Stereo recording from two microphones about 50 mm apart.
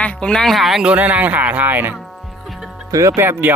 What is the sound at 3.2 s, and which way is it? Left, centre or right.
Speech, right.